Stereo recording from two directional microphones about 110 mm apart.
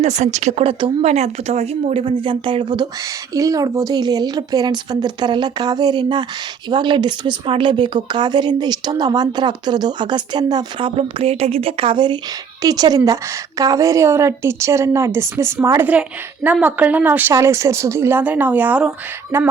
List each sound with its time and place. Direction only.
0.0 s a woman's voice: 90° right
0.6 s speech: 50° right (ahead or behind)
1.0 s a woman's voice: 70° right (ahead or behind); by 19.5 s 20° right (ahead or behind)